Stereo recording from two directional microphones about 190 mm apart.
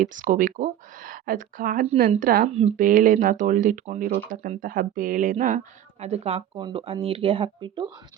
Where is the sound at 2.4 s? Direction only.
35° right (ahead or behind).